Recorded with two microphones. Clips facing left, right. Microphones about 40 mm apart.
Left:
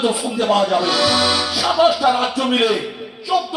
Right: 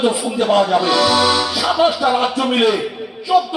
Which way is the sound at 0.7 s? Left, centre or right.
Centre.